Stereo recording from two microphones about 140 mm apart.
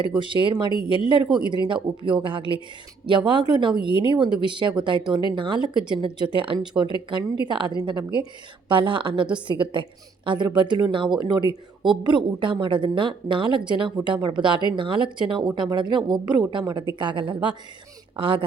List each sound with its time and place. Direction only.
0.2 s a woman's voice: 35° right (ahead or behind)